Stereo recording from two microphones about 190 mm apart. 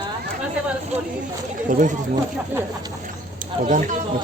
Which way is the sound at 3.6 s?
45° right (ahead or behind).